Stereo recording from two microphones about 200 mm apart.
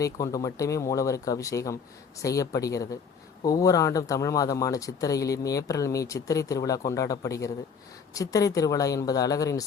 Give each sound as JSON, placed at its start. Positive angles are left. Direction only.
{"t": 0.0, "sound": "speech", "side_deg": 15}